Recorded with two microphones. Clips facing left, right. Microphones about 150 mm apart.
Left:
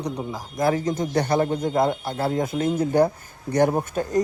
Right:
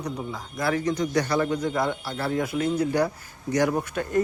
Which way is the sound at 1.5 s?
50° left (ahead or behind).